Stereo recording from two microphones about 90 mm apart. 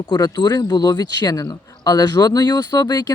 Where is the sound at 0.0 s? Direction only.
50° left (ahead or behind).